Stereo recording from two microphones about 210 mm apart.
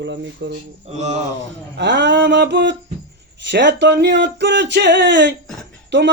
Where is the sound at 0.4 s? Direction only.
55° right (ahead or behind).